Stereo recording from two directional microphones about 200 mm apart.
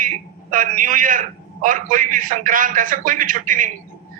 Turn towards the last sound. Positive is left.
turn(degrees=-40)  # may be behind; listen again after turning